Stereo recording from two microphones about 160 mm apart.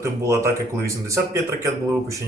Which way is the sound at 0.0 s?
20° right (ahead or behind).